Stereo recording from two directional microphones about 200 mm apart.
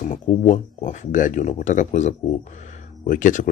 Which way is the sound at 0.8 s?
40° left (ahead or behind).